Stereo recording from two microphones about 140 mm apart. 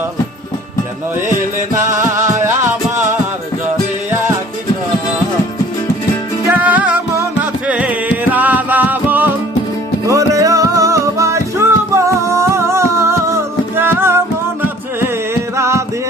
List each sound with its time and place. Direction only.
2.0 s music: 20° right (ahead or behind)
6.5 s music: 10° right (ahead or behind)
10.1 s music: 25° right (ahead or behind)
15.5 s music: 20° right (ahead or behind)